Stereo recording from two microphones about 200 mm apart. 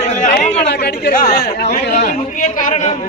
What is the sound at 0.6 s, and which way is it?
Speech, 55° left (ahead or behind).